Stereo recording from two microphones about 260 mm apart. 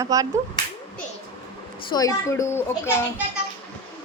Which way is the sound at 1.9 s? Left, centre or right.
Centre.